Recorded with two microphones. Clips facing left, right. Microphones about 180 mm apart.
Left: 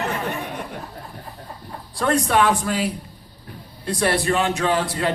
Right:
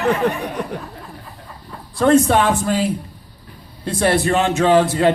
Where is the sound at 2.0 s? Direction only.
25° right (ahead or behind).